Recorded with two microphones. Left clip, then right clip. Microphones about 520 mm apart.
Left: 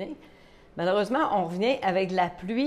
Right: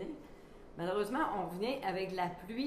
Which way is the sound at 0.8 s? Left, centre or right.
Left.